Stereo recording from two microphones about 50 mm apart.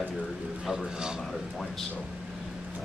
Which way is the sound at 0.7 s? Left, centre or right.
Centre.